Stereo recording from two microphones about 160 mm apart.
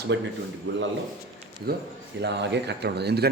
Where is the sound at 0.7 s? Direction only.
90° right.